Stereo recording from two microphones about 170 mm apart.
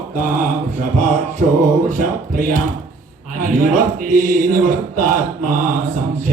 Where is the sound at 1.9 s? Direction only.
50° right (ahead or behind).